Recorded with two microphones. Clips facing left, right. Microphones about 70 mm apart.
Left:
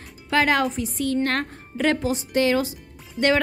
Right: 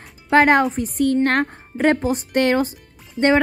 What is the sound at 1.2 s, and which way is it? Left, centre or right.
Speech, right.